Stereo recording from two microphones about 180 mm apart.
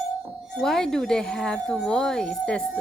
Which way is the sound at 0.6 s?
Centre (ahead or behind).